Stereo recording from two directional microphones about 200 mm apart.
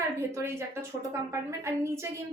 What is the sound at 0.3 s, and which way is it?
A woman's voice, 15° right (ahead or behind).